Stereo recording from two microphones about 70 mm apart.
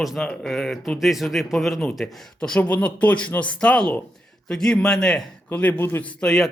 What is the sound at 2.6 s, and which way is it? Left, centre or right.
Speech, left.